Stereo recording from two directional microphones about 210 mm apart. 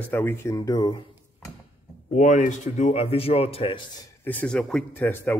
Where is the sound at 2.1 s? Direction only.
35° left (ahead or behind).